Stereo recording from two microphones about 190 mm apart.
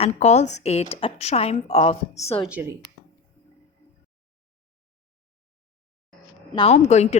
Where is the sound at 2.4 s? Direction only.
5° right (ahead or behind).